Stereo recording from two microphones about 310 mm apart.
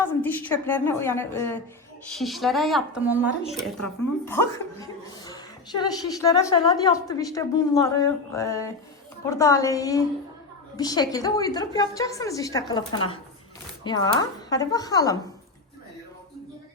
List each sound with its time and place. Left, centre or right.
0.0 s a woman's voice: centre